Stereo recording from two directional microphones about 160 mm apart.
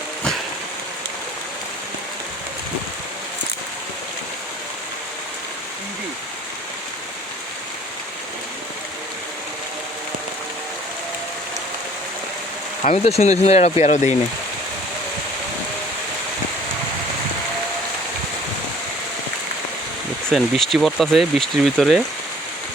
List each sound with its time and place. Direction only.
12.8 s speech: 40° left (ahead or behind)
20.3 s speech: centre (ahead or behind)